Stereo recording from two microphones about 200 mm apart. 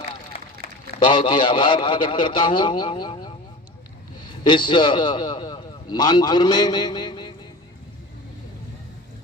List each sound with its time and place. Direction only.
0.3 s run: 30° left (ahead or behind)
1.1 s a man's voice: 20° left (ahead or behind)